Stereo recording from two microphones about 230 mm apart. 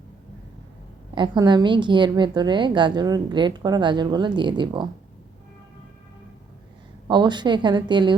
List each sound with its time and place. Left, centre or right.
1.1 s a woman's voice: centre
7.1 s a woman's voice: centre